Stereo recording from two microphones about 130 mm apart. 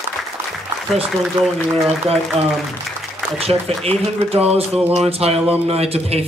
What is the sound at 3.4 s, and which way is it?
A man's voice, 50° right (ahead or behind).